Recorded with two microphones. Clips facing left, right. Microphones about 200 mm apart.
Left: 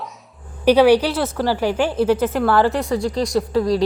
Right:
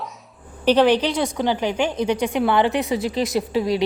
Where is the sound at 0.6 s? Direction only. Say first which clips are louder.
Left 3 dB; 10° left (ahead or behind).